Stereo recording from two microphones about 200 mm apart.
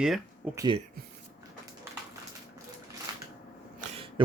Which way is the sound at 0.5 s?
20° right (ahead or behind).